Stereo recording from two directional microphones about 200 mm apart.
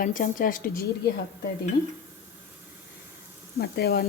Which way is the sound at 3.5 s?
50° left (ahead or behind).